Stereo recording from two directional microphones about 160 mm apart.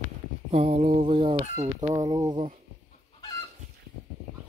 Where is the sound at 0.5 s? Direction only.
40° right (ahead or behind).